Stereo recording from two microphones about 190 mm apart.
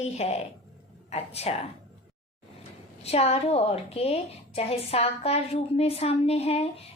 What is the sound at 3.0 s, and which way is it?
A woman's voice, 35° left (ahead or behind).